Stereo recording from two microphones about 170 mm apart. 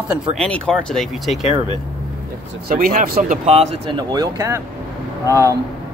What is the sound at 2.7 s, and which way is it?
Speech, 55° right (ahead or behind).